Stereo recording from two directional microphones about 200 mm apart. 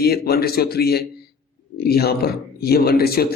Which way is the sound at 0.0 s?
50° left (ahead or behind).